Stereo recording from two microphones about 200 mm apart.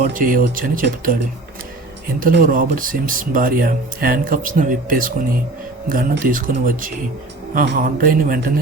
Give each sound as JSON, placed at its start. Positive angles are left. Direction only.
{"t": 0.0, "sound": "speech", "side_deg": -45}